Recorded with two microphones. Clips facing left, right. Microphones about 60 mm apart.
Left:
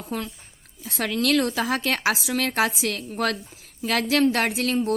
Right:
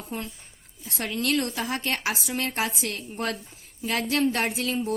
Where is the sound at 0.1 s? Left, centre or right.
Left.